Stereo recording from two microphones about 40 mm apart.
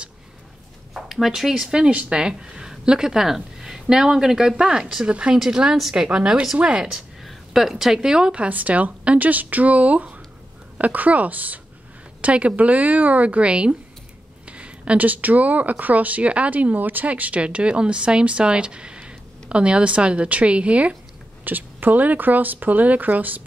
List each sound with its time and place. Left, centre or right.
0.9 s speech: centre
1.9 s speech: right
2.1 s speech: centre
7.2 s a woman's voice: centre; by 8.5 s right
8.5 s speech: right
21.5 s a woman's voice: right